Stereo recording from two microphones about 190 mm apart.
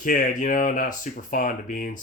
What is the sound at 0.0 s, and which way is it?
Speech, 45° left (ahead or behind).